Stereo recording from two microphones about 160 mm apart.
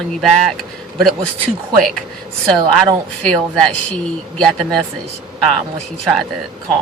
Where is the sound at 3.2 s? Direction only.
5° left (ahead or behind).